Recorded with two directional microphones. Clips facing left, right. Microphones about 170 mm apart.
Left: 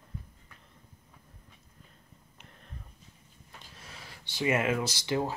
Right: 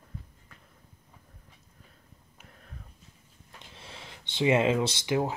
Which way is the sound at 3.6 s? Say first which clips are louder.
Right 4 dB; 25° right (ahead or behind).